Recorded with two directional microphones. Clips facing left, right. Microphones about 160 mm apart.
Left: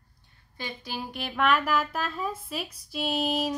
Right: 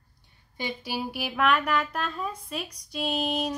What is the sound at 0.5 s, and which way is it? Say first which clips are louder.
Speech: right 4 dB; 15° right (ahead or behind).